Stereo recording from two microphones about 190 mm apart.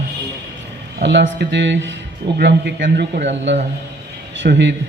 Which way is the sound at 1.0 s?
70° right (ahead or behind).